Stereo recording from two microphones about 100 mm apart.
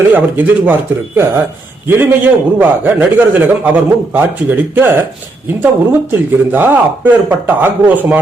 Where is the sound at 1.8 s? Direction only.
20° right (ahead or behind).